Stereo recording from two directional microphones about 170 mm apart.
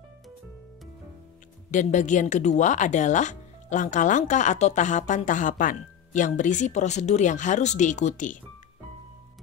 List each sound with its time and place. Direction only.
1.7 s speech: 45° left (ahead or behind)